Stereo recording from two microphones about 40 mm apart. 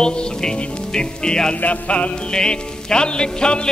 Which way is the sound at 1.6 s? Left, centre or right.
Left.